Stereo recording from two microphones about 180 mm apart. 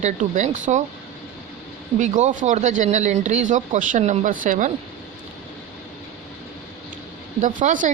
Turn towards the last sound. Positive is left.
turn(degrees=-45)  # may be behind; listen again after turning